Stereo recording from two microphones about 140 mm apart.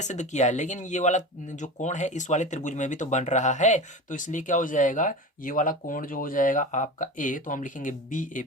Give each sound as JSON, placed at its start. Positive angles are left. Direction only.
{"t": 0.0, "sound": "speech", "side_deg": 55}